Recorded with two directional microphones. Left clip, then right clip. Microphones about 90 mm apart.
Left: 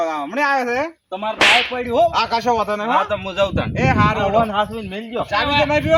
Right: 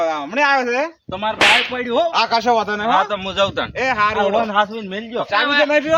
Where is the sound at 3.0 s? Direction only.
5° right (ahead or behind).